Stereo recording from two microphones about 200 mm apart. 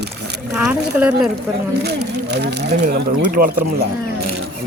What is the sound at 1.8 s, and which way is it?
Speech, 55° right (ahead or behind).